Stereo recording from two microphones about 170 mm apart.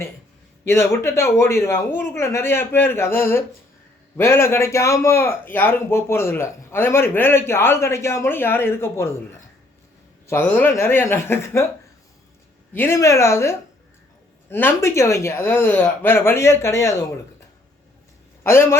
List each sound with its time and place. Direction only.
0.6 s a man's voice: 15° left (ahead or behind)
10.2 s a man's voice: 10° left (ahead or behind)
12.7 s a man's voice: 15° left (ahead or behind)
18.4 s a man's voice: 15° left (ahead or behind)